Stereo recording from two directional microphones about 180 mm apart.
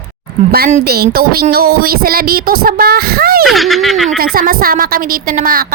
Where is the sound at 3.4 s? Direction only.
Centre (ahead or behind).